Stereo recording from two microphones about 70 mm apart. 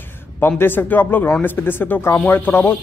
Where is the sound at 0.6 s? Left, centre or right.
Left.